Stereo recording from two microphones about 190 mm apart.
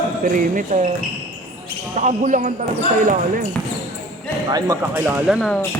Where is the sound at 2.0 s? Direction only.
40° right (ahead or behind).